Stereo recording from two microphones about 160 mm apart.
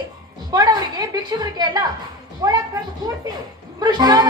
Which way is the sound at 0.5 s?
25° right (ahead or behind).